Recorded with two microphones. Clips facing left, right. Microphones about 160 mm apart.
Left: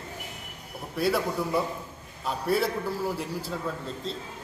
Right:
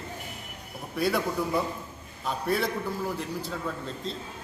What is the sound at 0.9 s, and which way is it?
A man's voice, centre (ahead or behind).